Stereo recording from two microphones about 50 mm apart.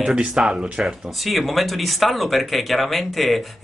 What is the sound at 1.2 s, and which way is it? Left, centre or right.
Speech, centre.